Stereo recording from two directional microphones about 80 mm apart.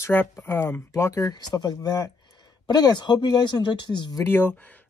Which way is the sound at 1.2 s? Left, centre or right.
Left.